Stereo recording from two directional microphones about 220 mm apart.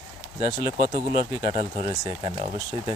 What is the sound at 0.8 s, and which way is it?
Speech, 40° right (ahead or behind).